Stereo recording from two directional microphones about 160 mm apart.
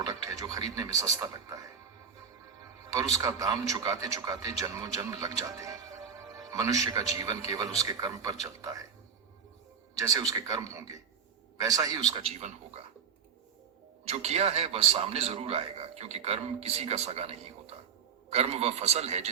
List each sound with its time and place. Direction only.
0.0 s music: 20° right (ahead or behind)
0.8 s a man's voice: 20° right (ahead or behind)
2.9 s a man's voice: 20° right (ahead or behind)
9.9 s a man's voice: 20° right (ahead or behind)
12.4 s speech: 45° right (ahead or behind)
14.1 s a man's voice: 40° right (ahead or behind)